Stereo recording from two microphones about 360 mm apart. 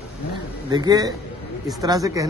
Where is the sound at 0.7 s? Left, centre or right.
Centre.